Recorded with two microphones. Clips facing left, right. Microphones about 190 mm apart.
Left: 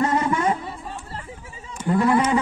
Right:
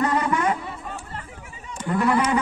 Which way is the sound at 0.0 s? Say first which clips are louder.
Left 1 dB; 25° left (ahead or behind).